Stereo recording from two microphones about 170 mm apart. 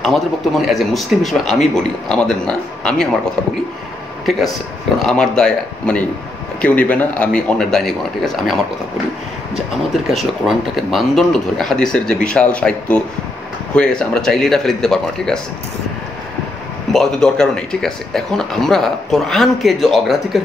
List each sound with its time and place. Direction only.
0.0 s speech: centre (ahead or behind)
4.3 s a man's voice: centre (ahead or behind)
10.0 s speech: centre (ahead or behind)
13.7 s speech: 5° left (ahead or behind)
16.9 s speech: 5° left (ahead or behind)